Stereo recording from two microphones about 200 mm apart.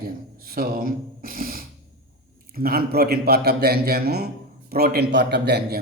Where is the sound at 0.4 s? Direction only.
45° right (ahead or behind).